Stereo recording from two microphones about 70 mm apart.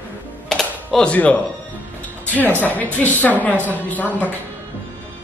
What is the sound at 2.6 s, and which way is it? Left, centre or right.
A woman's voice, left.